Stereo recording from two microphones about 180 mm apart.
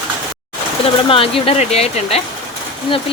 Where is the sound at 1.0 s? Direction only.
30° left (ahead or behind).